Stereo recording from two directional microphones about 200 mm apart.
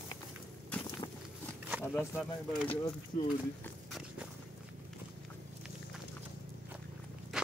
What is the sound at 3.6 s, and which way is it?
Horse, centre (ahead or behind).